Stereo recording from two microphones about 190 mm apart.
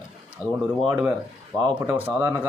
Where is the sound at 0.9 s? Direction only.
10° right (ahead or behind).